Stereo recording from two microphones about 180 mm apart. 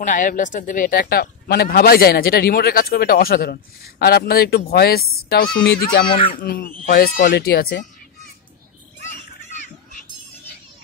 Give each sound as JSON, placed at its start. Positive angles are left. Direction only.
{"t": 0.0, "sound": "speech", "side_deg": 45}
{"t": 7.3, "sound": "speech", "side_deg": 65}